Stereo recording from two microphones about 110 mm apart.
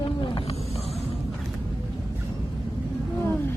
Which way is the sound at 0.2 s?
50° left (ahead or behind).